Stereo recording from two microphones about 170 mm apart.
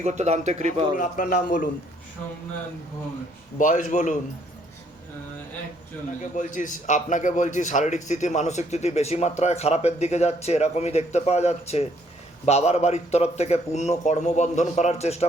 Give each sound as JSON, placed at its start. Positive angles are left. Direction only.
{"t": 0.0, "sound": "speech", "side_deg": -40}
{"t": 0.9, "sound": "a man's voice", "side_deg": 50}
{"t": 3.6, "sound": "a man's voice", "side_deg": 50}
{"t": 6.3, "sound": "a man's voice", "side_deg": 50}